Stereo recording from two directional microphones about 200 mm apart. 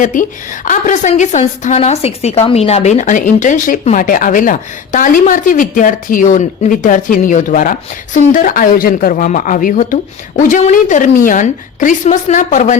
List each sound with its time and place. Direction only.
0.0 s a woman's voice: 40° left (ahead or behind)